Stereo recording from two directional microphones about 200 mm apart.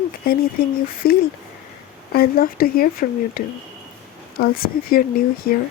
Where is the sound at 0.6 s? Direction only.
50° left (ahead or behind).